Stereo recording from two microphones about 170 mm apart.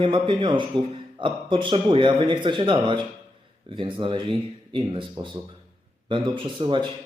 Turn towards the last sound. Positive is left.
turn(degrees=-30)  # may be behind; listen again after turning